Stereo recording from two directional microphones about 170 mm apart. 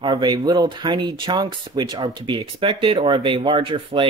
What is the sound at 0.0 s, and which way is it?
Speech, 25° right (ahead or behind).